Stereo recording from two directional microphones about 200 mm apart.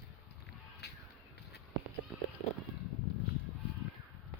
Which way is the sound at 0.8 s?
55° left (ahead or behind).